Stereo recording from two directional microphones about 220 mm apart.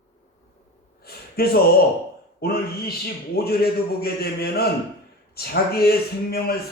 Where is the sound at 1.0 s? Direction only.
45° left (ahead or behind).